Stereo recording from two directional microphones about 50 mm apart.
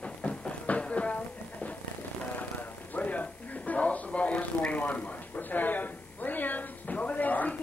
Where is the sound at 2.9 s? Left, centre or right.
Left.